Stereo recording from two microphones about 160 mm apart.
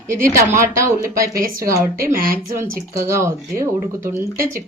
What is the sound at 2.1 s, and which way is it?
Speech, 65° right (ahead or behind).